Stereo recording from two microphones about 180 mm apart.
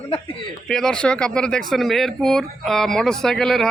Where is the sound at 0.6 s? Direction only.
5° left (ahead or behind).